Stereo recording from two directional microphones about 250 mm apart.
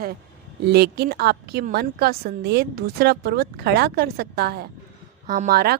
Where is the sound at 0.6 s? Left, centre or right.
Right.